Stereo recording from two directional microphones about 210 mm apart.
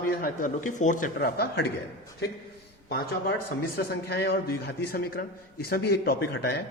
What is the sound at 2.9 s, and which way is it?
A man's voice, 50° left (ahead or behind).